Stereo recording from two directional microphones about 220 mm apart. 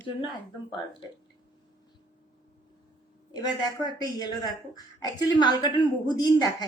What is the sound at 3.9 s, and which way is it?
A woman's voice, 20° left (ahead or behind).